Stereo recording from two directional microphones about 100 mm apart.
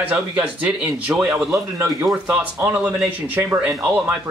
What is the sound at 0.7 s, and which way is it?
Speech, 15° right (ahead or behind).